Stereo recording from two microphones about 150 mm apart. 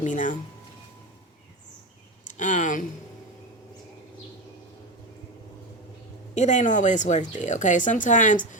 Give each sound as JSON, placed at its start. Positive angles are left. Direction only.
{"t": 0.0, "sound": "speech", "side_deg": 55}
{"t": 2.2, "sound": "speech", "side_deg": 55}
{"t": 6.3, "sound": "speech", "side_deg": 55}